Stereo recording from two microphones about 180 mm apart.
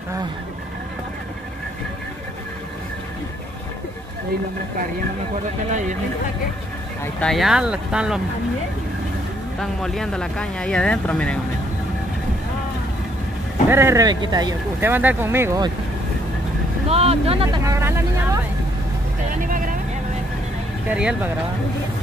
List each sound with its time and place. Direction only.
5.7 s speech: 45° right (ahead or behind)
7.2 s speech: centre (ahead or behind)
9.6 s speech: centre (ahead or behind)
13.7 s speech: 15° right (ahead or behind)
16.9 s speech: 35° right (ahead or behind)
17.6 s speech: 15° right (ahead or behind)
19.4 s vehicle: 50° right (ahead or behind)
20.9 s speech: 5° right (ahead or behind)